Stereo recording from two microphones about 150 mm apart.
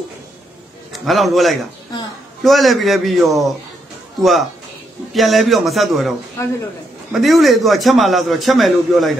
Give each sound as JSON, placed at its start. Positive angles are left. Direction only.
{"t": 0.9, "sound": "a man's voice", "side_deg": 0}
{"t": 6.4, "sound": "speech", "side_deg": 20}
{"t": 7.1, "sound": "a man's voice", "side_deg": 0}